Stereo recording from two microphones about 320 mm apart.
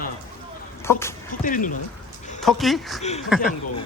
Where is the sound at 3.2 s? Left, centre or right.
Centre.